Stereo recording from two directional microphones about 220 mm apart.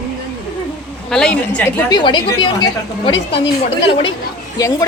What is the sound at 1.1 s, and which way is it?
Speech, 5° left (ahead or behind).